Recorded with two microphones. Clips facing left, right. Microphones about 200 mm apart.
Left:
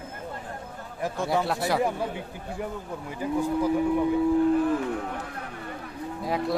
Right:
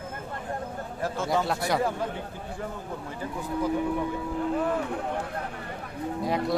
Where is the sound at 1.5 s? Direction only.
Centre (ahead or behind).